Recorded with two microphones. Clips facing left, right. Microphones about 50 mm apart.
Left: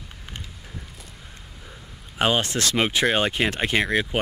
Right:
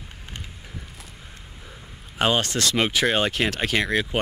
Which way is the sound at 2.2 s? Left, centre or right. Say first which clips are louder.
Even; centre.